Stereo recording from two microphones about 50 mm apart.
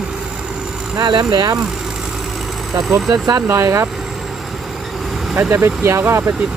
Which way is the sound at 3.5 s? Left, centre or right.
Right.